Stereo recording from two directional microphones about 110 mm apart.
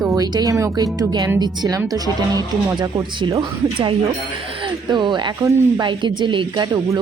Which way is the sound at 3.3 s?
50° right (ahead or behind).